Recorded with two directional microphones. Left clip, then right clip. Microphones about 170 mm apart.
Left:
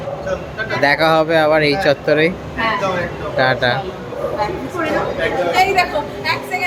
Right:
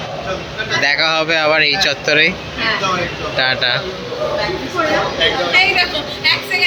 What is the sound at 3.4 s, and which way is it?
Speech, 20° left (ahead or behind).